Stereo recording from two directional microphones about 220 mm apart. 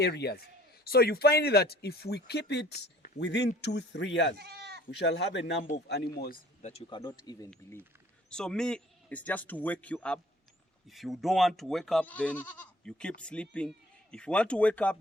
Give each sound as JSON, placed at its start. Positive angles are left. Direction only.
{"t": 0.0, "sound": "speech", "side_deg": 50}
{"t": 4.4, "sound": "goat", "side_deg": -45}
{"t": 4.9, "sound": "speech", "side_deg": 50}
{"t": 6.6, "sound": "speech", "side_deg": 30}
{"t": 7.0, "sound": "speech", "side_deg": 15}
{"t": 8.3, "sound": "speech", "side_deg": 5}